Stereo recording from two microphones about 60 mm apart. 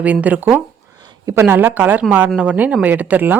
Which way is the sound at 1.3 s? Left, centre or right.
Right.